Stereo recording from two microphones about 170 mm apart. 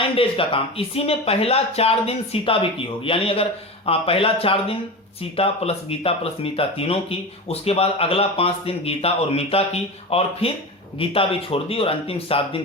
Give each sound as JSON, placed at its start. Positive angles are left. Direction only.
{"t": 0.0, "sound": "speech", "side_deg": 30}